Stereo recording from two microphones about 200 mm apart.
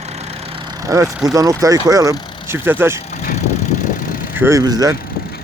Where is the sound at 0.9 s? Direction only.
15° right (ahead or behind).